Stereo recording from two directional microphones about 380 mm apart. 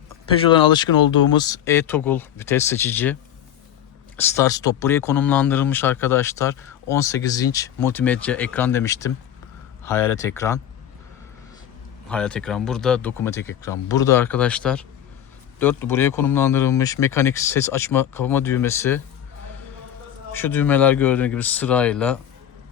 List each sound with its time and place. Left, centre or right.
0.5 s speech: centre
4.4 s speech: centre
12.0 s speech: centre
20.3 s speech: centre